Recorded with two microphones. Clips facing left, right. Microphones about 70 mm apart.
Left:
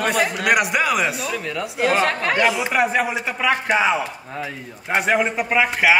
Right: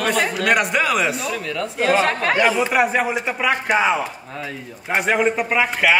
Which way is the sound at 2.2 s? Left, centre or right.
Right.